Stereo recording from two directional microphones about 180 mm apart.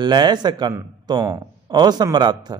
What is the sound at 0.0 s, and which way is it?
Speech, 25° right (ahead or behind).